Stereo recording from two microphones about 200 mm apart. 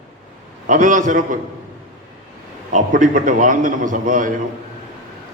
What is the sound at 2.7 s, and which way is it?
A man's voice, 40° right (ahead or behind).